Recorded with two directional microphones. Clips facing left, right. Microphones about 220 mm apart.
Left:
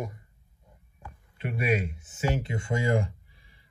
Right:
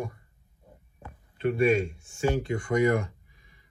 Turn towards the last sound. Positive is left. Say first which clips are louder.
# right 3 dB
turn(degrees=30)  # may be behind; listen again after turning